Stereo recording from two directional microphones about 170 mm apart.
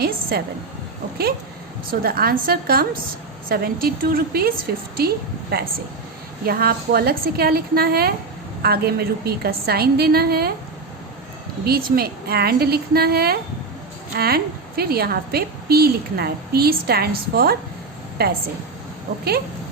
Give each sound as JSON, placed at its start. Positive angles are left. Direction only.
{"t": 0.0, "sound": "a woman's voice", "side_deg": -65}
{"t": 1.9, "sound": "a woman's voice", "side_deg": -60}
{"t": 11.6, "sound": "a woman's voice", "side_deg": -65}